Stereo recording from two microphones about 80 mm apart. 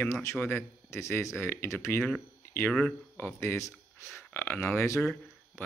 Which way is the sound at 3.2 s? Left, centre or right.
Left.